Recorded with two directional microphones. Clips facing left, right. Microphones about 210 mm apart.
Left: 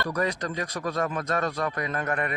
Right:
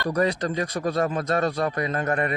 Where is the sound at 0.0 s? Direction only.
30° right (ahead or behind).